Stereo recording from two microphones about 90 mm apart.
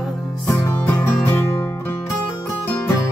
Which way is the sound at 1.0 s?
20° left (ahead or behind).